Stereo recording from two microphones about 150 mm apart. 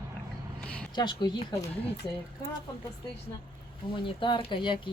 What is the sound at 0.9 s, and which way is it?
Speech, 30° left (ahead or behind).